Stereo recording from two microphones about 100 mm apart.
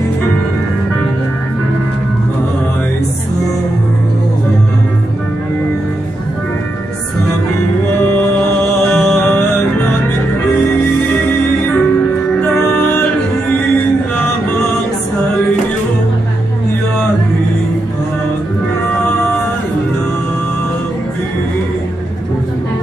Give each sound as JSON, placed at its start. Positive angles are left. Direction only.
{"t": 8.2, "sound": "music", "side_deg": 15}
{"t": 12.4, "sound": "music", "side_deg": 20}